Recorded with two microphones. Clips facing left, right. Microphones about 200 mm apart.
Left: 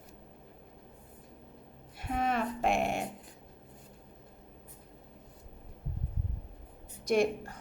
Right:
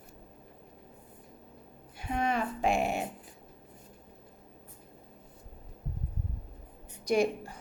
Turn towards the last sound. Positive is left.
turn(degrees=0)  # may be behind; listen again after turning